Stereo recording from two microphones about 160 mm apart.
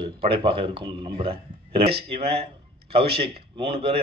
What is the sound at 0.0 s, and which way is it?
Speech, 35° right (ahead or behind).